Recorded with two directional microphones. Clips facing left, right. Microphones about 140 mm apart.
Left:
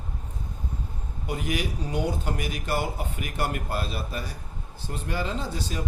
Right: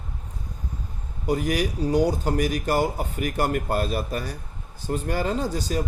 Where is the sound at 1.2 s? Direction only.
40° right (ahead or behind).